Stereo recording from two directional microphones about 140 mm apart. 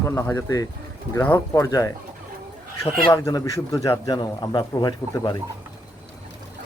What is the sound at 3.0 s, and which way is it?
A man's voice, 25° left (ahead or behind).